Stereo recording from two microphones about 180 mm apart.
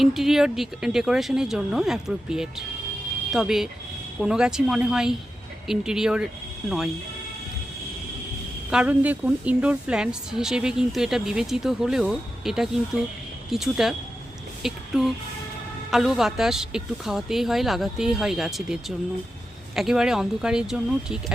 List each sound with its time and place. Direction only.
0.0 s speech: centre (ahead or behind)
8.7 s speech: 5° right (ahead or behind)